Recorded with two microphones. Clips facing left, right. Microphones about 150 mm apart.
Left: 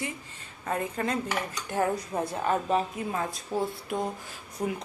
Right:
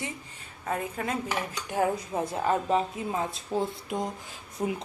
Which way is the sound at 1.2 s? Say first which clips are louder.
Even; 15° right (ahead or behind).